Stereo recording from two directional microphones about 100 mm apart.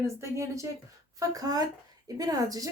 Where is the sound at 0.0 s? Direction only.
30° right (ahead or behind).